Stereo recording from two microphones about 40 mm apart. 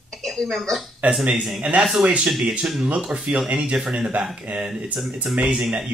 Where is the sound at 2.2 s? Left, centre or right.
Centre.